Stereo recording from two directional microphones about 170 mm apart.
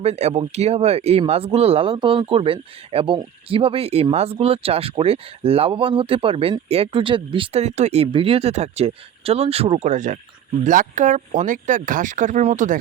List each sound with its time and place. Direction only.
0.0 s speech: 40° right (ahead or behind)
9.9 s speech: 45° right (ahead or behind)